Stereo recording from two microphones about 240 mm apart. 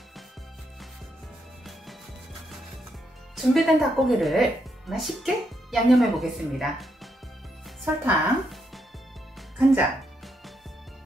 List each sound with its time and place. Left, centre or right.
3.3 s speech: centre
9.6 s music: centre